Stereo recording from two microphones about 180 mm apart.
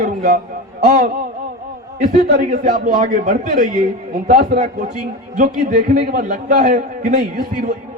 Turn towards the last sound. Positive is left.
turn(degrees=-45)  # may be behind; listen again after turning